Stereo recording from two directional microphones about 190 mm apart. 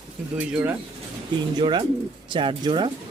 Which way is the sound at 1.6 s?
25° right (ahead or behind).